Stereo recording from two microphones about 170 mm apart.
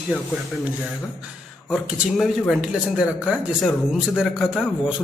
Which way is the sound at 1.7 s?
5° left (ahead or behind).